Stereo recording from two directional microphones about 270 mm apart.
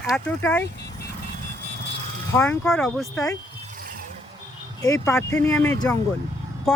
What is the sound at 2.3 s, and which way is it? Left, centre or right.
Speech, centre.